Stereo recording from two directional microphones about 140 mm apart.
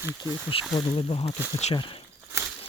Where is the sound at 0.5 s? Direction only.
40° left (ahead or behind).